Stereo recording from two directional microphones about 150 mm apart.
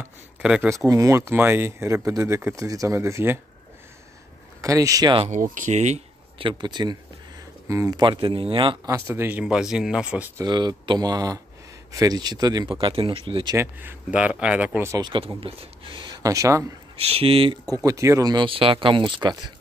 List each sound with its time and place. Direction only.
0.4 s speech: 5° right (ahead or behind)
0.7 s speech: 20° right (ahead or behind)
4.6 s speech: 20° right (ahead or behind)
5.2 s speech: 60° right (ahead or behind); by 8.9 s 35° right (ahead or behind)
8.9 s speech: 15° right (ahead or behind)
10.3 s speech: 30° right (ahead or behind)
13.6 s speech: 15° right (ahead or behind)
14.9 s speech: 30° right (ahead or behind)
16.9 s speech: 40° right (ahead or behind)
17.6 s speech: 20° right (ahead or behind)